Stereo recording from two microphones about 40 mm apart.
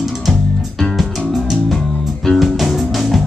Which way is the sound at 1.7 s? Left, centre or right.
Centre.